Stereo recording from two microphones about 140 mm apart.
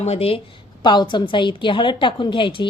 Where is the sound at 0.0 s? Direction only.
50° left (ahead or behind).